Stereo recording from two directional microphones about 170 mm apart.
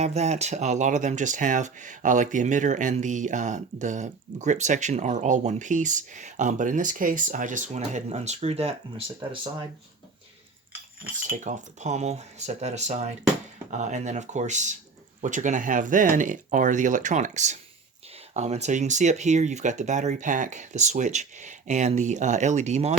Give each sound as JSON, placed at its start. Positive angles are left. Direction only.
{"t": 0.0, "sound": "speech", "side_deg": -40}
{"t": 11.3, "sound": "speech", "side_deg": -45}